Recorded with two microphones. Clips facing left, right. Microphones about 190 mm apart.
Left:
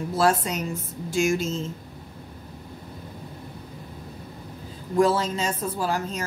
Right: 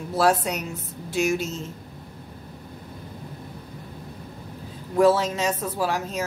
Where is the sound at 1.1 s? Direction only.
65° right (ahead or behind).